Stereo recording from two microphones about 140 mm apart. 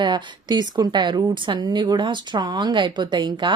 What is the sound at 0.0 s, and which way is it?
A woman's voice, 35° right (ahead or behind).